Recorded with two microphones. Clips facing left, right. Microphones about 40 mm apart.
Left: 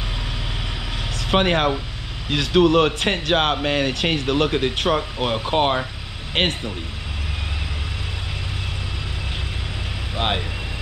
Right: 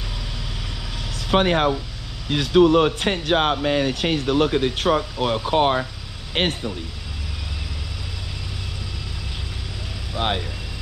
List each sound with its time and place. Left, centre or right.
1.3 s speech: left
10.1 s vehicle: left